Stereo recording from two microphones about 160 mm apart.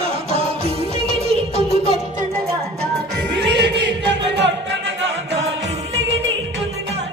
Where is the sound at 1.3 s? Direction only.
40° right (ahead or behind).